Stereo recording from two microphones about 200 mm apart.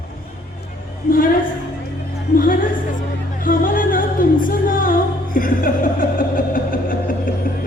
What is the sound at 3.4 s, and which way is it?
Music, 45° left (ahead or behind).